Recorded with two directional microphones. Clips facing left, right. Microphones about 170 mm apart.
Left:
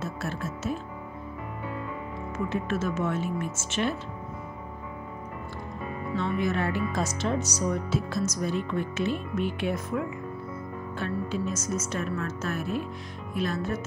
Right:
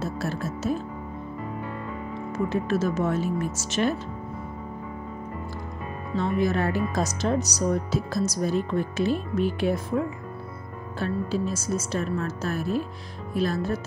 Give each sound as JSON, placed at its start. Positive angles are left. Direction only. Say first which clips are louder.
{"t": 0.0, "sound": "music", "louder": "right 4 dB", "side_deg": -35}
{"t": 2.3, "sound": "speech", "louder": "right 4 dB", "side_deg": -35}
{"t": 6.1, "sound": "speech", "louder": "right 4 dB", "side_deg": -35}